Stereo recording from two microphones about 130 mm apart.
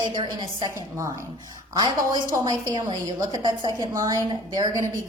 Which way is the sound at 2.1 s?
30° right (ahead or behind).